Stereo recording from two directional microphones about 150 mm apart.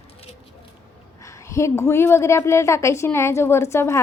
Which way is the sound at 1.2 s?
20° left (ahead or behind).